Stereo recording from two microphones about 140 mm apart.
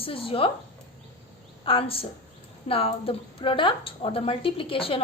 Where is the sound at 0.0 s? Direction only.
40° left (ahead or behind).